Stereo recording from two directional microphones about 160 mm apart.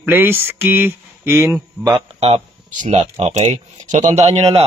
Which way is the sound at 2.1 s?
40° right (ahead or behind).